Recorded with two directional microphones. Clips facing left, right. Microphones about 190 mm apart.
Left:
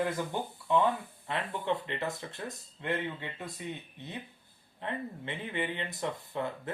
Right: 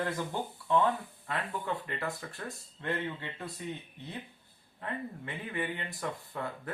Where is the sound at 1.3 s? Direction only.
20° left (ahead or behind).